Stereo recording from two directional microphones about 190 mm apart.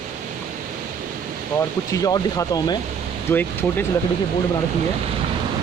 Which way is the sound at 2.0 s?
20° left (ahead or behind).